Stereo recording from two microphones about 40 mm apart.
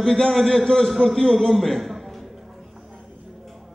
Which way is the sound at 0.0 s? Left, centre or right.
Centre.